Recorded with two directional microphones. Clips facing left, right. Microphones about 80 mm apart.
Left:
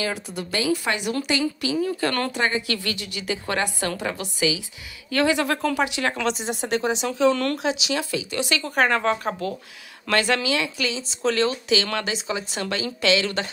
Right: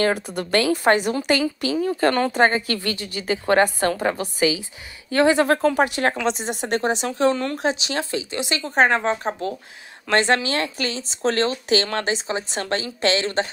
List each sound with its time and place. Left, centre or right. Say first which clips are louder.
0.0 s a woman's voice: right 7 dB; right